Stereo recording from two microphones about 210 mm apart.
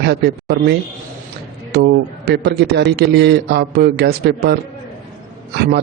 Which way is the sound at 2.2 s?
50° right (ahead or behind).